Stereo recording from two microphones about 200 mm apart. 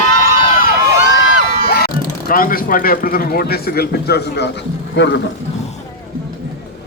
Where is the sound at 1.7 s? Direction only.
50° left (ahead or behind).